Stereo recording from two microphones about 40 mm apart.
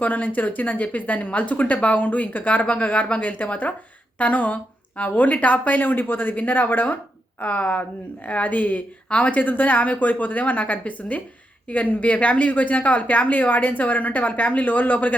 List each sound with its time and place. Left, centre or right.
0.0 s a woman's voice: left